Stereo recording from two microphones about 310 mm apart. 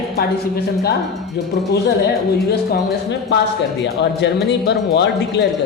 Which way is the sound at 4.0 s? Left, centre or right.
Left.